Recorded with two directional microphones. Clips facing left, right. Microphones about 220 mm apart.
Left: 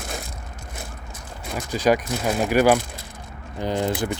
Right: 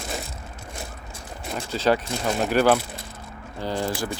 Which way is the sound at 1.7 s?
15° left (ahead or behind).